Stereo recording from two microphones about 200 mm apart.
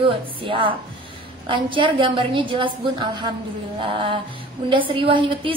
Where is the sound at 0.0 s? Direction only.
25° right (ahead or behind).